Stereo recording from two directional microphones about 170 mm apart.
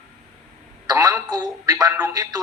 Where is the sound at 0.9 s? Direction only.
20° right (ahead or behind).